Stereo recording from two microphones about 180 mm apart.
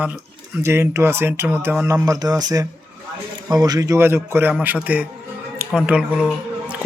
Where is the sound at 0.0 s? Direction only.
10° right (ahead or behind).